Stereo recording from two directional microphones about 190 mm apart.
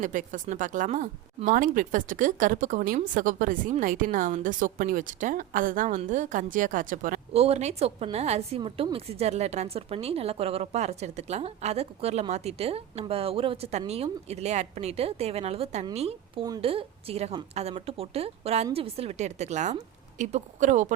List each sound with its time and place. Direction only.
0.0 s speech: 40° right (ahead or behind)